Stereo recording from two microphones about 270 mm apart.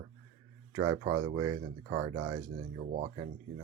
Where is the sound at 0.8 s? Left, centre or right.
Centre.